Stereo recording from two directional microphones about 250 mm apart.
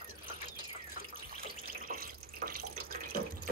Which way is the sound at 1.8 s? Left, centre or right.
Right.